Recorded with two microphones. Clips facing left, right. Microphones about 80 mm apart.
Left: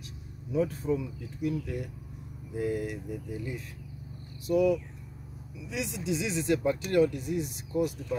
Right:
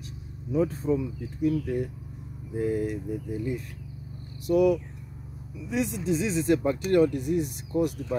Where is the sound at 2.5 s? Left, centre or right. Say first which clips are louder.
Right 4 dB; right.